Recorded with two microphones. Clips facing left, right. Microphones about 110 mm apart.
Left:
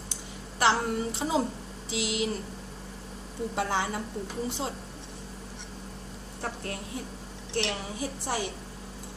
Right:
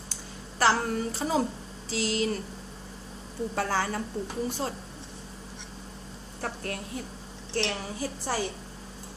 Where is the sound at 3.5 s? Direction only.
20° left (ahead or behind).